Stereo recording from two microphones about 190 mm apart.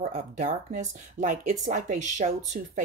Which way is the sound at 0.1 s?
40° right (ahead or behind).